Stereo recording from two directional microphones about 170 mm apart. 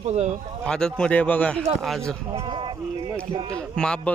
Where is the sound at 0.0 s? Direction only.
40° right (ahead or behind).